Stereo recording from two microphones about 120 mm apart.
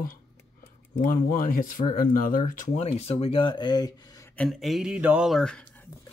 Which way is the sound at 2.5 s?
80° left.